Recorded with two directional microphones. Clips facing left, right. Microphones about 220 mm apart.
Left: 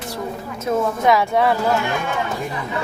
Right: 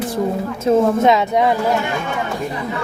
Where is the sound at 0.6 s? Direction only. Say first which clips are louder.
Right 5 dB; 25° right (ahead or behind).